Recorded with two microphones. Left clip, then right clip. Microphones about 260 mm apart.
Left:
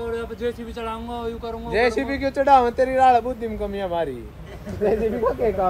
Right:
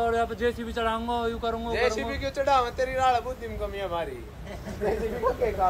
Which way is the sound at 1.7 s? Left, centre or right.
Left.